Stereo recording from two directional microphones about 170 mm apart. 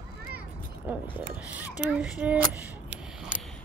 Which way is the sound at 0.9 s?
10° right (ahead or behind).